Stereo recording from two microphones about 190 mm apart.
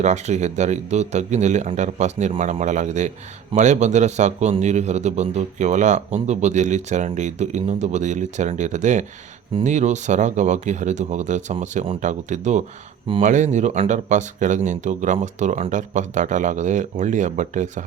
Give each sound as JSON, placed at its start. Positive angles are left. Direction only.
{"t": 0.0, "sound": "speech", "side_deg": -40}